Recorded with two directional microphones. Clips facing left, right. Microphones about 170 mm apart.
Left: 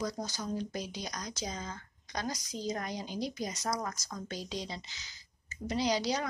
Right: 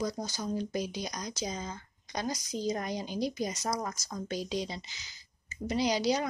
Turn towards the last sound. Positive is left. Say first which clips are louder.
# right 3 dB
turn(degrees=-15)  # may be behind; listen again after turning